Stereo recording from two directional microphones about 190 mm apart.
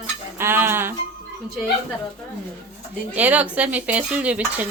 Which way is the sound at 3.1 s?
10° right (ahead or behind).